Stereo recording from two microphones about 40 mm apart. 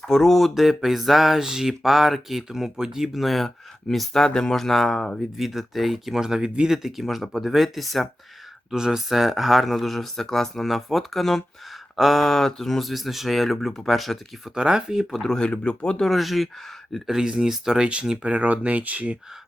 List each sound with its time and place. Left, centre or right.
0.1 s speech: centre
3.2 s speech: centre
4.2 s speech: centre
5.4 s speech: centre
6.8 s speech: centre
8.7 s speech: centre
14.4 s speech: centre
15.4 s speech: left
16.0 s speech: centre
17.1 s speech: centre
18.2 s speech: right